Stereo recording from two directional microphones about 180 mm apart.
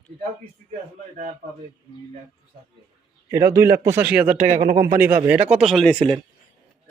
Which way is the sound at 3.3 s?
15° right (ahead or behind).